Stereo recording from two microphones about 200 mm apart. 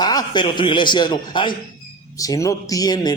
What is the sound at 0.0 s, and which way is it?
A man's voice, 20° left (ahead or behind).